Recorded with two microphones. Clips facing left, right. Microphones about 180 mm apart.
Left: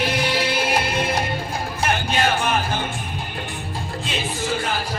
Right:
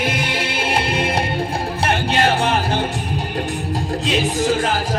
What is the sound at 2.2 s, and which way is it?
Music, 30° right (ahead or behind).